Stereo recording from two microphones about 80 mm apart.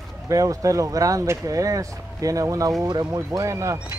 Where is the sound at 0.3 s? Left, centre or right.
Right.